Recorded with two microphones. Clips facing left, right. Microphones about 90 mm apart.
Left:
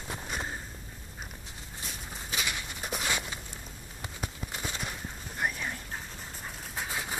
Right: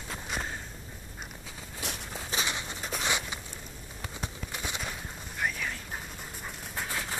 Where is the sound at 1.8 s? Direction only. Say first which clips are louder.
Right 6 dB; 90° right.